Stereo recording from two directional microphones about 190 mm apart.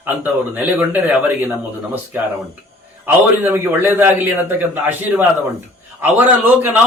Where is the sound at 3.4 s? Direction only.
10° right (ahead or behind).